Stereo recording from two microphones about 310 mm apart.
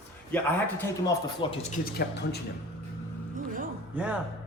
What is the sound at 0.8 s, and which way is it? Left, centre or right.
Speech, centre.